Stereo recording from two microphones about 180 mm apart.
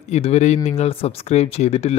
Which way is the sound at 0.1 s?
35° left (ahead or behind).